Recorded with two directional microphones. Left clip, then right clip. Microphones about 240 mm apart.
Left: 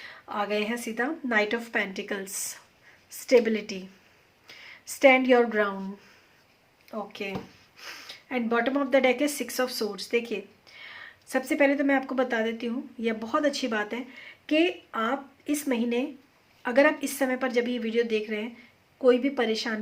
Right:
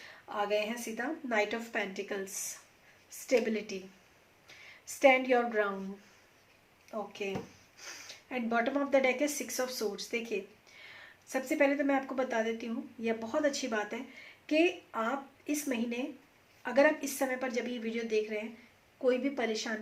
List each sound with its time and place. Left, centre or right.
0.0 s speech: left
6.9 s speech: left